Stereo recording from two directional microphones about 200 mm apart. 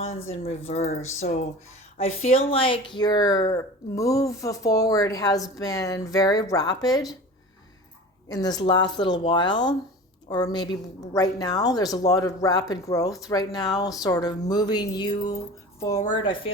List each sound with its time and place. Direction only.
0.1 s speech: 85° left
0.7 s speech: 30° left (ahead or behind)
1.2 s speech: 45° left (ahead or behind)
2.0 s speech: 30° left (ahead or behind)
8.3 s speech: 20° left (ahead or behind)
16.2 s speech: 25° left (ahead or behind)